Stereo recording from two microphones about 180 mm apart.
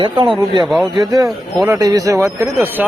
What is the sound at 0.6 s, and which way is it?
Speech, centre (ahead or behind).